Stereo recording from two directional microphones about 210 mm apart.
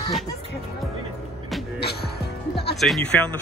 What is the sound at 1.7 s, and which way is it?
Music, 50° left (ahead or behind).